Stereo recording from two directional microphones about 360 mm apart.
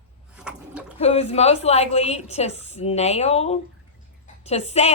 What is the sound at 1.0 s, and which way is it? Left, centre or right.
Speech, centre.